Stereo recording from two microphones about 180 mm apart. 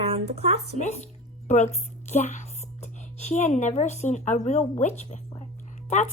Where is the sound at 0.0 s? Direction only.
35° right (ahead or behind).